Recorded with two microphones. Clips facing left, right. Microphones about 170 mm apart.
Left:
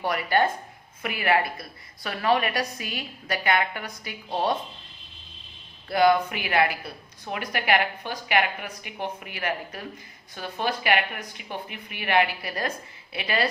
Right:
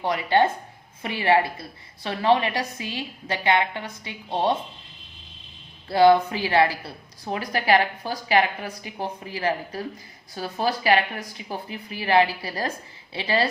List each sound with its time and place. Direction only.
0.0 s a woman's voice: 20° right (ahead or behind)
5.9 s a woman's voice: 30° right (ahead or behind)